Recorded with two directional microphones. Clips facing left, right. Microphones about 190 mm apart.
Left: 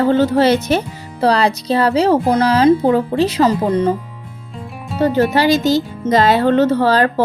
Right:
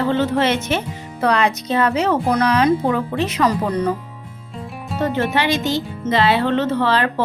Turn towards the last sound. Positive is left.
turn(degrees=40)  # may be behind; listen again after turning